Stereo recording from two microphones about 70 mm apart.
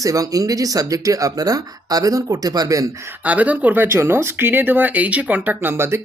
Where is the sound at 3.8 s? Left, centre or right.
Right.